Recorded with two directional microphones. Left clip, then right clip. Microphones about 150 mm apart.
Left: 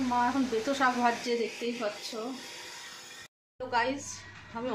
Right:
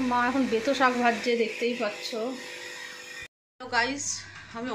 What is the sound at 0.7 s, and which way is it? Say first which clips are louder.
Speech: right 3 dB; 25° right (ahead or behind).